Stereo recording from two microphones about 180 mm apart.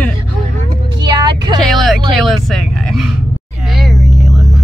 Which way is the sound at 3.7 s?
Centre (ahead or behind).